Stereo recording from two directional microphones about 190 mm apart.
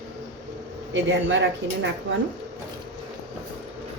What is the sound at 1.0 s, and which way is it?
Speech, 75° right (ahead or behind).